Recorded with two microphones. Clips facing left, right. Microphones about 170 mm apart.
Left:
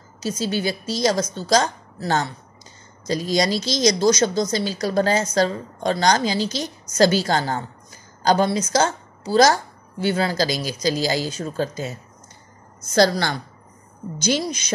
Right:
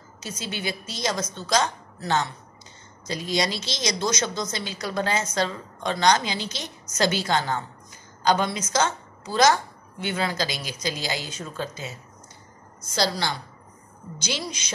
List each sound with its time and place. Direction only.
0.2 s a woman's voice: 35° left (ahead or behind)
12.9 s a woman's voice: 50° left (ahead or behind)